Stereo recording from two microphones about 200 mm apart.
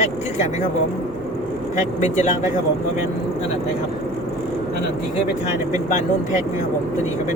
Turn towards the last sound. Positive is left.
turn(degrees=35)  # may be behind; listen again after turning